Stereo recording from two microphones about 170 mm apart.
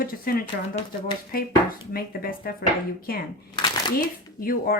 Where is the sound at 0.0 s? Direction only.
60° left (ahead or behind).